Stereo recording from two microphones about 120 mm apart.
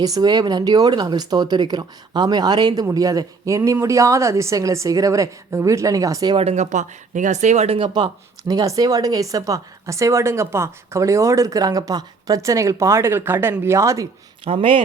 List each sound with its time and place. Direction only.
0.0 s speech: 35° right (ahead or behind)
6.3 s speech: 60° right (ahead or behind)
7.8 s speech: 40° right (ahead or behind); by 14.1 s 25° right (ahead or behind)
14.4 s speech: 45° right (ahead or behind)